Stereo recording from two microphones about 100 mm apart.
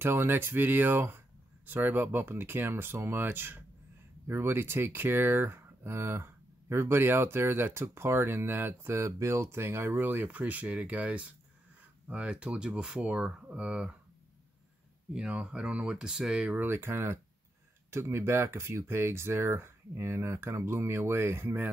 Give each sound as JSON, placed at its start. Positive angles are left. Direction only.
{"t": 0.0, "sound": "speech", "side_deg": -20}
{"t": 15.1, "sound": "speech", "side_deg": -10}